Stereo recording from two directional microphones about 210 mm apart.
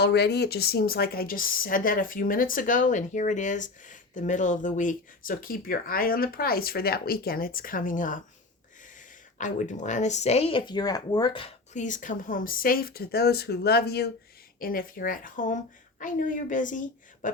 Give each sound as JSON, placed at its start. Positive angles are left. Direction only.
{"t": 0.0, "sound": "speech", "side_deg": 50}
{"t": 9.4, "sound": "speech", "side_deg": 35}